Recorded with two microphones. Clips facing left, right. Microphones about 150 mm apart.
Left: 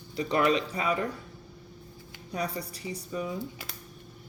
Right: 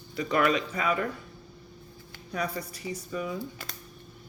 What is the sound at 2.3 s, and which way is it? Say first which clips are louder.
A woman's voice: right 1 dB; 35° left (ahead or behind).